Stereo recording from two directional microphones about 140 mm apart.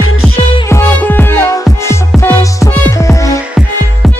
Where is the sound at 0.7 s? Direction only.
15° left (ahead or behind).